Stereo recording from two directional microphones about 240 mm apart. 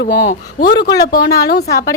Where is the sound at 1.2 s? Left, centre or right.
Centre.